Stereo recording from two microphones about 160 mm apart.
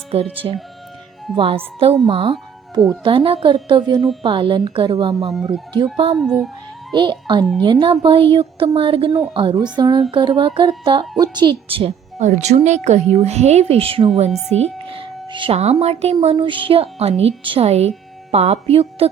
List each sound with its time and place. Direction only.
0.1 s speech: 35° right (ahead or behind)
5.3 s speech: centre (ahead or behind)
5.7 s speech: 35° right (ahead or behind)
6.1 s speech: centre (ahead or behind)
6.9 s a child's voice: 30° right (ahead or behind)